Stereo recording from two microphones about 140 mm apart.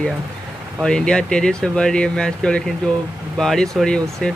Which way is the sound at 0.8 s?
5° left (ahead or behind).